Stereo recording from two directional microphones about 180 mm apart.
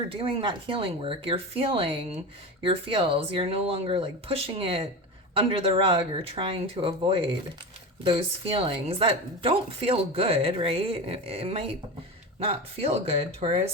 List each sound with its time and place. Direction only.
0.1 s speech: 30° right (ahead or behind)